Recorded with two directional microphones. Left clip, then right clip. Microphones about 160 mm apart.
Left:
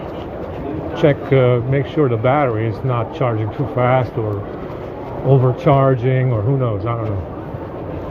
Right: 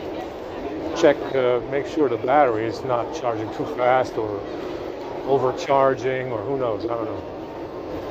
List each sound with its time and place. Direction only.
0.9 s speech: 65° left (ahead or behind)
5.3 s speech: 65° left (ahead or behind)